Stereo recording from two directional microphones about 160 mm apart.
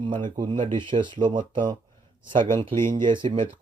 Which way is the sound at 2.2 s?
55° right (ahead or behind).